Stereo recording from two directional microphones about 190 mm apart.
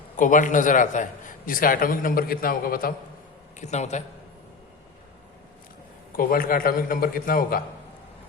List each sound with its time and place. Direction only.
0.2 s a man's voice: 45° left (ahead or behind)
3.6 s a man's voice: 35° left (ahead or behind)
6.1 s a man's voice: 50° left (ahead or behind)